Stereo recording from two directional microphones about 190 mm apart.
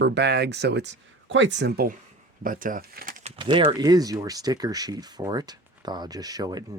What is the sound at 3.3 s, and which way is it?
Speech, 25° right (ahead or behind).